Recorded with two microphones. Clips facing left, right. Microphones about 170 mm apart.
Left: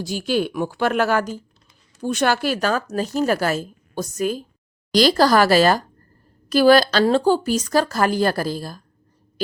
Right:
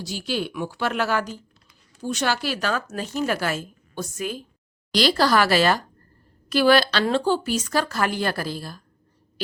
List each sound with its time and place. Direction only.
0.0 s speech: 50° left (ahead or behind)